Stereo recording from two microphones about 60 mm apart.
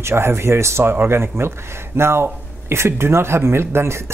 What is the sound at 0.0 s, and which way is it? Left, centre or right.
Speech, right.